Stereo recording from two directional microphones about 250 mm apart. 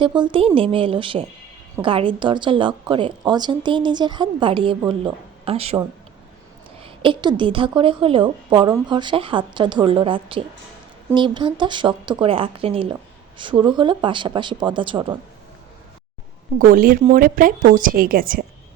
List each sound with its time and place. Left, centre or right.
0.0 s a woman's voice: centre
16.6 s speech: right